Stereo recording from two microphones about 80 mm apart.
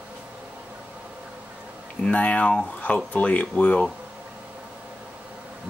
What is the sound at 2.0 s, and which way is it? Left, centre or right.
Speech, centre.